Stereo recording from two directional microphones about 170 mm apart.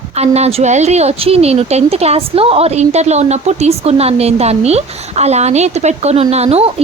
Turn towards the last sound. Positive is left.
turn(degrees=-35)  # may be behind; listen again after turning